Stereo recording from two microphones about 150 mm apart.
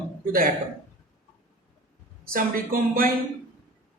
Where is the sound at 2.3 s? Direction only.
70° right (ahead or behind).